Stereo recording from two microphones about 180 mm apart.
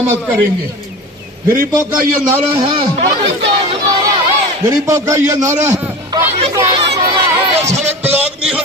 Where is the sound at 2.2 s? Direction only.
25° right (ahead or behind).